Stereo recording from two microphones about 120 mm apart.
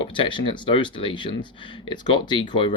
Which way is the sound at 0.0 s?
45° left (ahead or behind).